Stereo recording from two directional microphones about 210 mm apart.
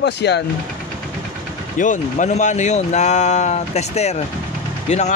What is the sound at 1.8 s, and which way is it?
Speech, 35° left (ahead or behind).